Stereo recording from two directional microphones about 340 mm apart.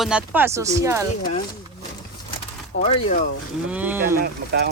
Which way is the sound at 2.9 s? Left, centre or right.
Left.